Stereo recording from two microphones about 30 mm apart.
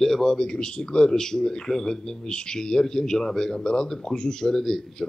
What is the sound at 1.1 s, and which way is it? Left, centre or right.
Speech, centre.